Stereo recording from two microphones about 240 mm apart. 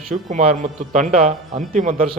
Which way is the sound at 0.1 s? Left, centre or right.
Right.